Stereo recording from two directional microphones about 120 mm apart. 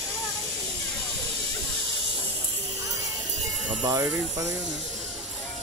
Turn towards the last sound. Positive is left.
turn(degrees=-25)  # may be behind; listen again after turning